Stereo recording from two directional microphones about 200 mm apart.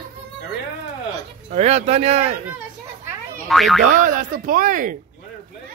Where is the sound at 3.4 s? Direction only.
Centre (ahead or behind).